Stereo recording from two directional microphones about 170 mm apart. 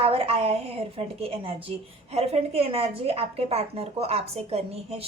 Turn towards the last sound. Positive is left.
turn(degrees=-35)  # may be behind; listen again after turning